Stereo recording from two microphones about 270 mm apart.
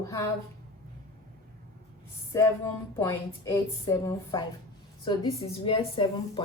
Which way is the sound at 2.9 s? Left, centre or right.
Centre.